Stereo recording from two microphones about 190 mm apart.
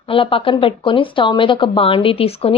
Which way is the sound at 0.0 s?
30° left (ahead or behind).